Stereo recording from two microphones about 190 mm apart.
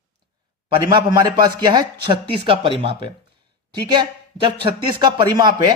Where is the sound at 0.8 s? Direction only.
20° right (ahead or behind).